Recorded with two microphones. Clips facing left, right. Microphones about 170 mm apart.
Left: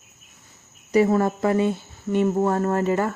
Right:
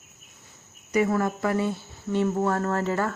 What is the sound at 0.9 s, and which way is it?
Speech, 30° left (ahead or behind).